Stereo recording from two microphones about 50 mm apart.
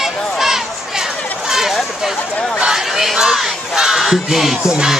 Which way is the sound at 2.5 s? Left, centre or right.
Centre.